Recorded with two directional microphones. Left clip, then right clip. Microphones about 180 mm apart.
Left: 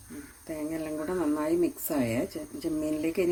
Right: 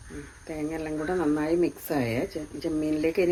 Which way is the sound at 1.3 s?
45° left (ahead or behind).